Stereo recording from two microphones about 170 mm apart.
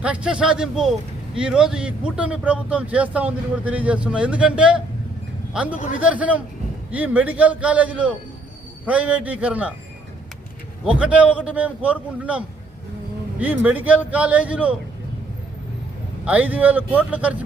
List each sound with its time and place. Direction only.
0.0 s speech: 5° right (ahead or behind)
5.7 s a man's voice: 45° left (ahead or behind)
6.0 s speech: 10° right (ahead or behind)
10.8 s speech: 10° right (ahead or behind)
13.4 s speech: 10° right (ahead or behind)
16.2 s speech: 10° right (ahead or behind)